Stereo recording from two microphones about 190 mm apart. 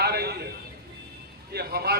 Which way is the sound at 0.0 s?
60° right (ahead or behind).